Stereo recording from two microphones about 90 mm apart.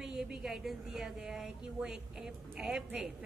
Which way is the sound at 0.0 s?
5° right (ahead or behind).